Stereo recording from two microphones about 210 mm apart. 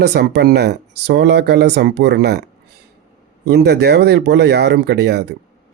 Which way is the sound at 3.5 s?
55° right (ahead or behind).